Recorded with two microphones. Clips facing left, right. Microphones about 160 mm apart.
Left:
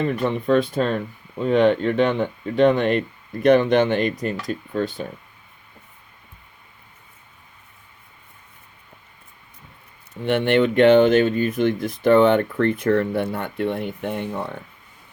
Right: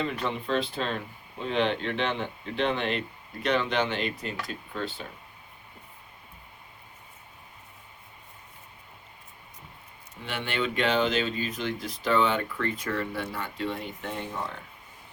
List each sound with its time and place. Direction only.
0.0 s speech: 50° left (ahead or behind)
10.2 s speech: 60° left (ahead or behind)